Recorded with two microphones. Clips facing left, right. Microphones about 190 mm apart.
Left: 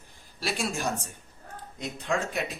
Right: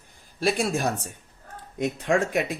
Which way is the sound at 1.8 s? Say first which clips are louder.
Right 7 dB; 70° right (ahead or behind).